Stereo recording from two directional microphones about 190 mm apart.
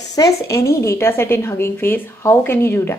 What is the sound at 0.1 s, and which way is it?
A woman's voice, 15° left (ahead or behind).